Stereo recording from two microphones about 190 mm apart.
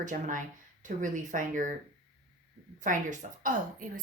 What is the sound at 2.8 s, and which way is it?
A woman's voice, 40° right (ahead or behind).